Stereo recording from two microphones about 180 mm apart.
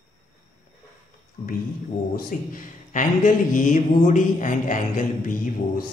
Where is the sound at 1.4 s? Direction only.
15° left (ahead or behind).